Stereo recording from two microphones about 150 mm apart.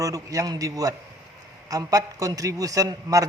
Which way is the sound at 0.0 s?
20° right (ahead or behind).